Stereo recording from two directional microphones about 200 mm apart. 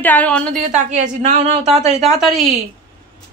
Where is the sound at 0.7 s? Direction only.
35° right (ahead or behind).